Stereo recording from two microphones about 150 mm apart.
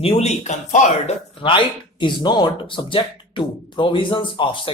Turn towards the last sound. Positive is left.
turn(degrees=35)  # may be behind; listen again after turning